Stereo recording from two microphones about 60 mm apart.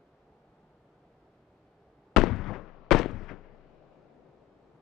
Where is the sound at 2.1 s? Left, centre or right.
Centre.